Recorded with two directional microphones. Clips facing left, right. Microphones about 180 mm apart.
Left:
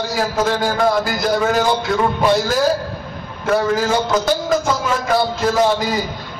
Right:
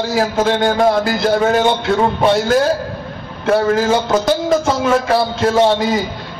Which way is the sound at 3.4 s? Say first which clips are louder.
Right 3 dB; 25° right (ahead or behind).